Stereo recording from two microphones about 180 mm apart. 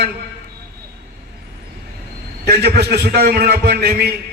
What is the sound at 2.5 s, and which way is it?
A man's voice, 60° right (ahead or behind).